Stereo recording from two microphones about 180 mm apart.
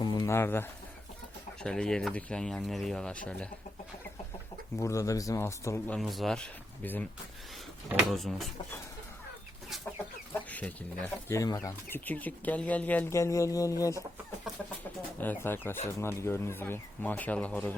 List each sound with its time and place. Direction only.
0.0 s bird: 25° left (ahead or behind)
1.6 s speech: 5° left (ahead or behind)
4.8 s speech: 15° left (ahead or behind)
6.0 s speech: centre (ahead or behind)
7.9 s speech: centre (ahead or behind)
10.5 s speech: 10° left (ahead or behind)
15.2 s speech: 10° left (ahead or behind)